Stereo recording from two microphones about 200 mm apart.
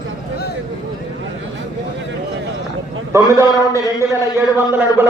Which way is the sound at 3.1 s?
15° right (ahead or behind).